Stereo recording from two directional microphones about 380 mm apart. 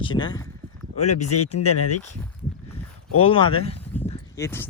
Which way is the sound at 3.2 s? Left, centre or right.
Centre.